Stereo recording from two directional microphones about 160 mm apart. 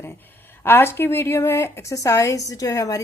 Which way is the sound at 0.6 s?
15° left (ahead or behind).